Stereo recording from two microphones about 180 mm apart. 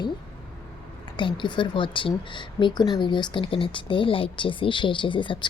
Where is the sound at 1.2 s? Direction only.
25° left (ahead or behind).